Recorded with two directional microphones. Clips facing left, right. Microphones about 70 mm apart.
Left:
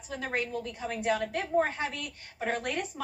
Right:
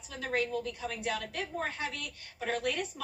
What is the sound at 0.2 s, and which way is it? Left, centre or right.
A woman's voice, left.